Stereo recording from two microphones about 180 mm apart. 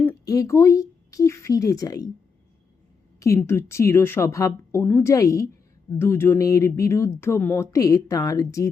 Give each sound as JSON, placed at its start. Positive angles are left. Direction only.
{"t": 0.0, "sound": "speech", "side_deg": 15}
{"t": 3.2, "sound": "speech", "side_deg": 15}